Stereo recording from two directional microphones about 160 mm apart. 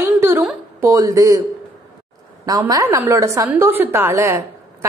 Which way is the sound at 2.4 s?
20° right (ahead or behind).